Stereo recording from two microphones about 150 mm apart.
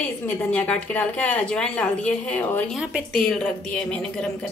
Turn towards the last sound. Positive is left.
turn(degrees=5)  # may be behind; listen again after turning